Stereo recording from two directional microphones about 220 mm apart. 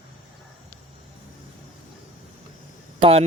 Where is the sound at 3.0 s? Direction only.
25° right (ahead or behind).